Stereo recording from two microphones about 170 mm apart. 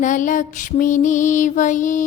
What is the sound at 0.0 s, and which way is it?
Mantra, 50° left (ahead or behind).